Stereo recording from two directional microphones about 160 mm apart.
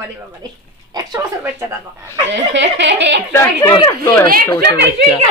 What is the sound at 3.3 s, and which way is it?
Speech, 15° left (ahead or behind).